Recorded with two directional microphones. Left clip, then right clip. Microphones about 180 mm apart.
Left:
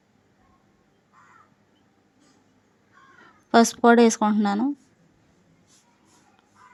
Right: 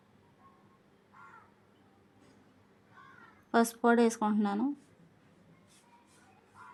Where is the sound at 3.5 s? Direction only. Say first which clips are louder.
Left 10 dB; 30° left (ahead or behind).